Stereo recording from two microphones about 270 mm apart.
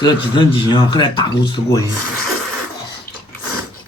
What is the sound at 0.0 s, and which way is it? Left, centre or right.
Speech, centre.